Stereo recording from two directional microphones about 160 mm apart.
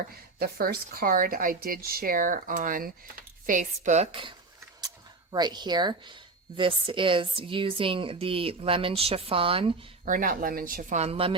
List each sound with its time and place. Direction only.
0.3 s speech: 75° right (ahead or behind); by 3.7 s 55° right (ahead or behind)
3.8 s speech: 40° right (ahead or behind)
10.1 s speech: 55° right (ahead or behind); by 11.3 s 35° right (ahead or behind)